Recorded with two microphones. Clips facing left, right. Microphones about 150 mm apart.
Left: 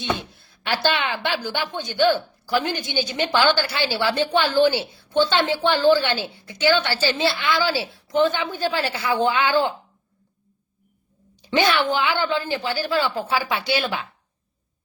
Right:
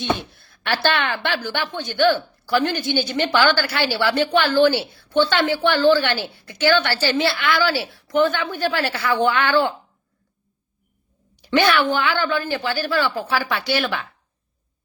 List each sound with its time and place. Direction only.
0.7 s a woman's voice: 15° left (ahead or behind)
11.5 s a woman's voice: 20° left (ahead or behind)